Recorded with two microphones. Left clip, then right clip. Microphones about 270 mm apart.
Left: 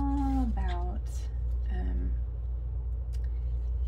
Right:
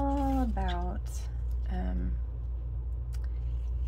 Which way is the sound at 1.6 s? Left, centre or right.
Centre.